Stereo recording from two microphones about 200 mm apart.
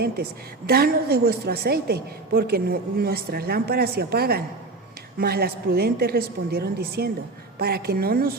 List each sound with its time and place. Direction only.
0.7 s a woman's voice: 50° right (ahead or behind)